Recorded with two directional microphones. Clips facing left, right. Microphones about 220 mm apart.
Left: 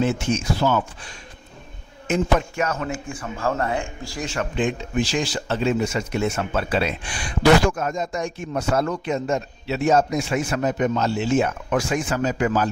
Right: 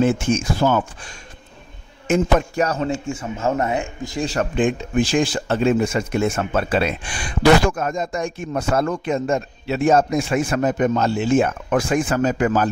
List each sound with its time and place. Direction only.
0.0 s a man's voice: 50° right (ahead or behind); by 4.3 s 20° right (ahead or behind)
4.3 s speech: 45° right (ahead or behind)